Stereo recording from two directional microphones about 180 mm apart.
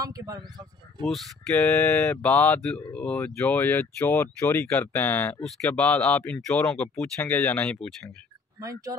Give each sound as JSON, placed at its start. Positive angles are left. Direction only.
{"t": 0.0, "sound": "speech", "side_deg": -20}
{"t": 1.0, "sound": "speech", "side_deg": 5}
{"t": 8.5, "sound": "speech", "side_deg": -20}